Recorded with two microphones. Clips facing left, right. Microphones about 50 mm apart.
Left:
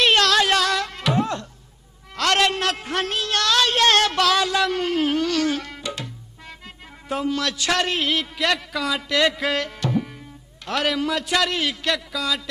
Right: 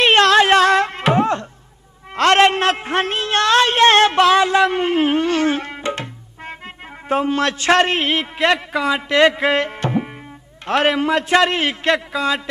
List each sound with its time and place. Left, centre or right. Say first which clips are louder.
0.0 s music: right 5 dB; right
2.1 s a sound: right 7 dB; right
7.1 s a man's voice: right 6 dB; right